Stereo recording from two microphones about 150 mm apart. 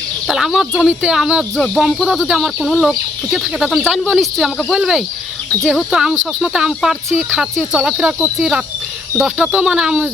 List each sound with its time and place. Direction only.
0.3 s speech: centre (ahead or behind)